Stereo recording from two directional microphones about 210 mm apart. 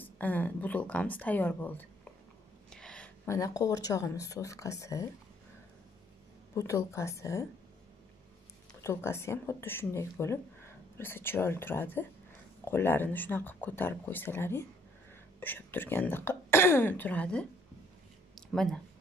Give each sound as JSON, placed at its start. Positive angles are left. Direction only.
{"t": 0.0, "sound": "speech", "side_deg": 10}
{"t": 2.7, "sound": "a sound", "side_deg": 5}
{"t": 3.3, "sound": "speech", "side_deg": 15}
{"t": 6.5, "sound": "speech", "side_deg": 15}
{"t": 8.8, "sound": "speech", "side_deg": 10}
{"t": 18.3, "sound": "a sound", "side_deg": 0}